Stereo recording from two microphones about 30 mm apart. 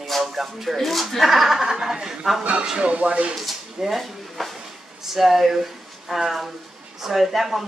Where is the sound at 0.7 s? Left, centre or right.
Centre.